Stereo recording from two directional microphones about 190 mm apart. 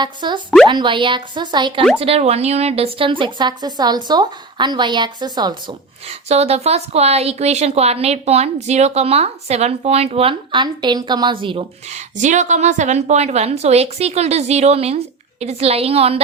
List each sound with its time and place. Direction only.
0.0 s a woman's voice: 25° right (ahead or behind)
6.1 s a woman's voice: 35° right (ahead or behind)